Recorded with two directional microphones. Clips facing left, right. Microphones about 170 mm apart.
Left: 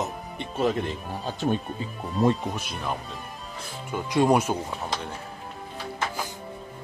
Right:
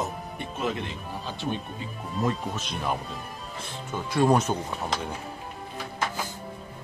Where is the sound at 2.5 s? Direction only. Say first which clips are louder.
Right 1 dB; 5° left (ahead or behind).